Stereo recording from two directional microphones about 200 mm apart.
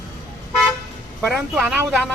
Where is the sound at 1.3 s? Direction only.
Centre (ahead or behind).